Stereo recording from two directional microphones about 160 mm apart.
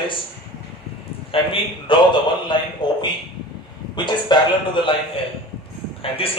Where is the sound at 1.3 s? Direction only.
35° left (ahead or behind).